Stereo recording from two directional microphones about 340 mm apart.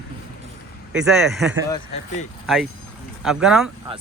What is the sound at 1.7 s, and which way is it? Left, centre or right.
Speech, centre.